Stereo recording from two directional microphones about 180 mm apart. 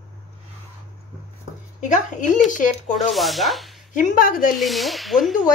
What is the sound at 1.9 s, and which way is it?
A woman's voice, 45° left (ahead or behind).